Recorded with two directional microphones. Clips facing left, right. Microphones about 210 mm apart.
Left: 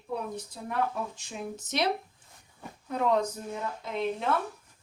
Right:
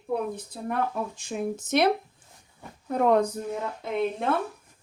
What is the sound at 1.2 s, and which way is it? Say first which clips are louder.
Speech: right 8 dB; 55° right (ahead or behind).